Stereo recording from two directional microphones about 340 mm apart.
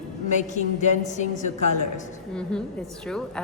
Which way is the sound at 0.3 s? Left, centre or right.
Left.